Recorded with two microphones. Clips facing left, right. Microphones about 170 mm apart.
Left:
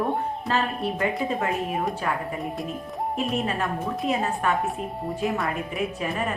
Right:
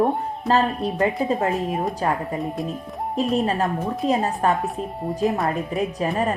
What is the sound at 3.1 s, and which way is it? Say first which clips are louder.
Speech: right 6 dB; 35° right (ahead or behind).